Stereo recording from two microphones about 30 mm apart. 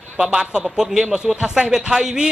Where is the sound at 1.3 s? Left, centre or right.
Right.